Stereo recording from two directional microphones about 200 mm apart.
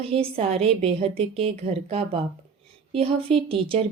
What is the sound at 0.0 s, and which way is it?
Speech, 30° right (ahead or behind).